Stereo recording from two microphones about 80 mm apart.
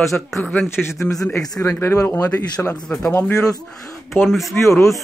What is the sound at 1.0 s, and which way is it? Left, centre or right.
Speech, left.